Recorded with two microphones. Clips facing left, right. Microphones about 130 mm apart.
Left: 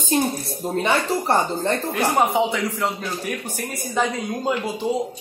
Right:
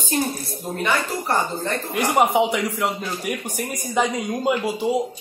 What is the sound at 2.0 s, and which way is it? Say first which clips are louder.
Speech: right 3 dB; 15° right (ahead or behind).